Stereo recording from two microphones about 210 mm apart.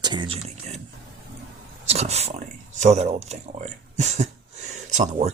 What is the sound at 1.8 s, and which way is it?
Speech, 30° right (ahead or behind).